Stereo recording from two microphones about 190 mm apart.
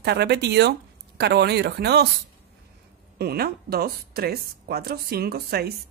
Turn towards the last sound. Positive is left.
turn(degrees=-55)  # may be behind; listen again after turning